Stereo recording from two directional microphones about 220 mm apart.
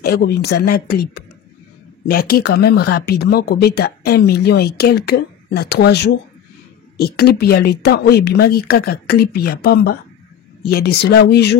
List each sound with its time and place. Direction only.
0.0 s speech: 50° left (ahead or behind)